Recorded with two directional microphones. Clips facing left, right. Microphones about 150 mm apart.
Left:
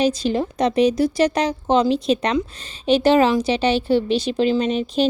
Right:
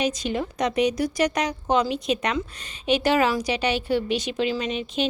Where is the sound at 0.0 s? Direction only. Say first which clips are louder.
Left 6 dB; 30° left (ahead or behind).